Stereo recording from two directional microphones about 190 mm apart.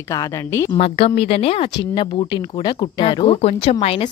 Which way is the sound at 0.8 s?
30° left (ahead or behind).